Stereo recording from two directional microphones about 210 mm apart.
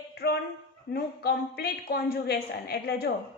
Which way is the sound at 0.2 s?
50° left (ahead or behind).